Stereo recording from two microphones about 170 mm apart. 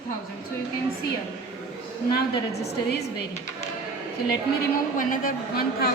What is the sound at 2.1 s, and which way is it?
Speech, 70° left (ahead or behind).